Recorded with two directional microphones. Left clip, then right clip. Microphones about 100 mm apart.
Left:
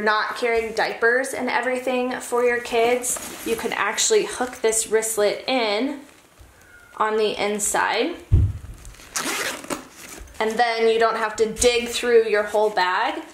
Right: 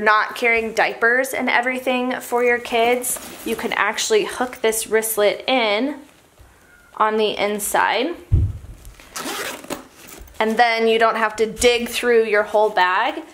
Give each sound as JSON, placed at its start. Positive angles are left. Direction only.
{"t": 0.0, "sound": "speech", "side_deg": -40}
{"t": 2.3, "sound": "speech", "side_deg": -50}
{"t": 2.6, "sound": "speech", "side_deg": -35}
{"t": 7.0, "sound": "speech", "side_deg": -30}
{"t": 9.1, "sound": "zipper", "side_deg": 0}
{"t": 10.3, "sound": "speech", "side_deg": -40}